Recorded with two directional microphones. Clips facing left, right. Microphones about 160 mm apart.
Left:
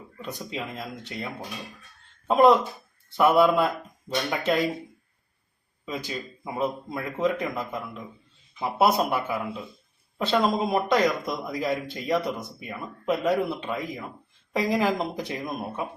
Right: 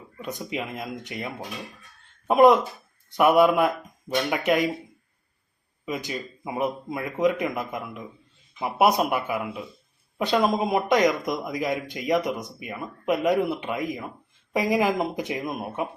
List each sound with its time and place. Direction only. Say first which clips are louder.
0.2 s a man's voice: right 3 dB; 20° right (ahead or behind)
5.8 s a man's voice: right 2 dB; 20° right (ahead or behind)